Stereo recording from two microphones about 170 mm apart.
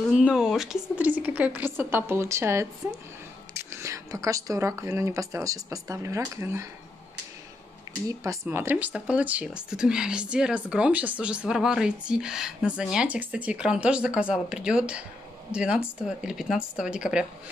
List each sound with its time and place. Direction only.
0.1 s speech: 5° right (ahead or behind)
8.1 s speech: 20° right (ahead or behind)